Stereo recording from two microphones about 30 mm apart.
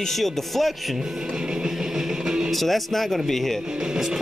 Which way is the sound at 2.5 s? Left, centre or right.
Centre.